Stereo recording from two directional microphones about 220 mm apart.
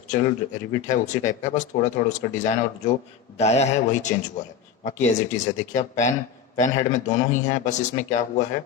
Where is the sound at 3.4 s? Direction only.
30° left (ahead or behind).